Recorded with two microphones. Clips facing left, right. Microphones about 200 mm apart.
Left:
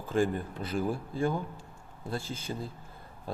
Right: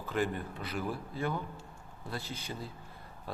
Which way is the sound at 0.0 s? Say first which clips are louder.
Left 5 dB; 30° left (ahead or behind).